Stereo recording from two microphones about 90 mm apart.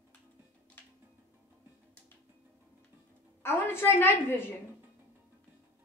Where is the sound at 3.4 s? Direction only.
25° left (ahead or behind).